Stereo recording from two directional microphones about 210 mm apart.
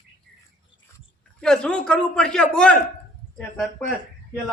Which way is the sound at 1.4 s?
5° left (ahead or behind).